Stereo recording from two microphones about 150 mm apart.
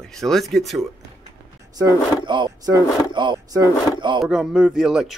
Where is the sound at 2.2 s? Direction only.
30° right (ahead or behind).